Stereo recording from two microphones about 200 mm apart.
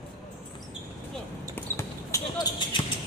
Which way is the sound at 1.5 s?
15° left (ahead or behind).